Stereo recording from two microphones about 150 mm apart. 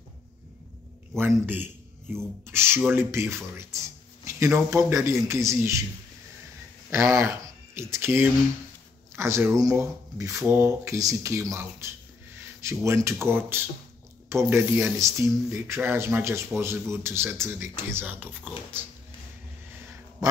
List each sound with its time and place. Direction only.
1.1 s a man's voice: 15° right (ahead or behind)
6.9 s speech: 20° right (ahead or behind)